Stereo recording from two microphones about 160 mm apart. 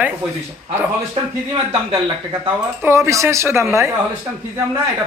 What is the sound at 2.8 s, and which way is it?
A man's voice, 15° right (ahead or behind).